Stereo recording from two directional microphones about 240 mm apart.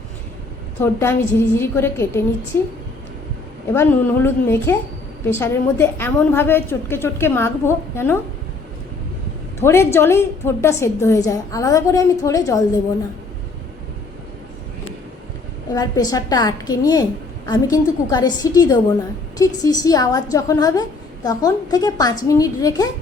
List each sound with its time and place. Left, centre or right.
0.8 s a woman's voice: centre
9.6 s a woman's voice: centre
15.7 s a woman's voice: centre